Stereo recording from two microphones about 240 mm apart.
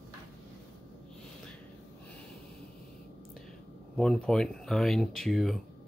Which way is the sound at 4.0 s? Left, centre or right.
Centre.